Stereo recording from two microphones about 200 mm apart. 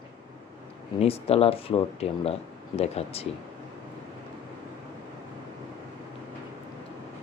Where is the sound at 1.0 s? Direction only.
30° left (ahead or behind).